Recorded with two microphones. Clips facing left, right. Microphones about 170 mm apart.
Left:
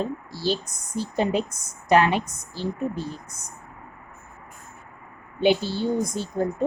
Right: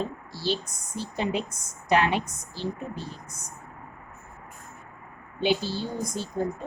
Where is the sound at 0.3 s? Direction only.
45° left (ahead or behind).